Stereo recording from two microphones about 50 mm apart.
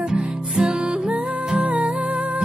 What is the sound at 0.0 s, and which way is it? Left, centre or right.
Music, centre.